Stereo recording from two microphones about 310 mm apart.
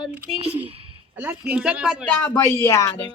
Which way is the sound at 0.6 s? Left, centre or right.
Centre.